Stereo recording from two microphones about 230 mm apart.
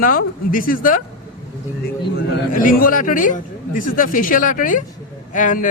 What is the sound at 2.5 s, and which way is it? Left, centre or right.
A man's voice, left.